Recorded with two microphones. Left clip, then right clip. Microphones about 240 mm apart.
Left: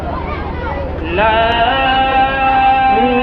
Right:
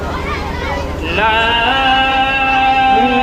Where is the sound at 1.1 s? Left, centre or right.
Right.